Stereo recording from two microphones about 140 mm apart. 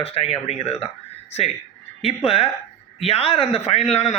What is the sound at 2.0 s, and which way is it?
A man's voice, 45° left (ahead or behind).